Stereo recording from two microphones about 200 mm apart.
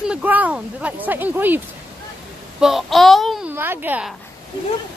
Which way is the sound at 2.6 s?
Centre (ahead or behind).